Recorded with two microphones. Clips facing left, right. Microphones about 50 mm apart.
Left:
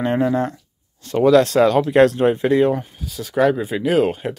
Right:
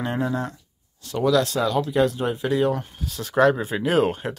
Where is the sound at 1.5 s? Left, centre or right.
Left.